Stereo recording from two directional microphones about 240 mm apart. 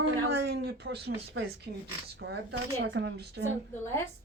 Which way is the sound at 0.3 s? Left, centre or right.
Right.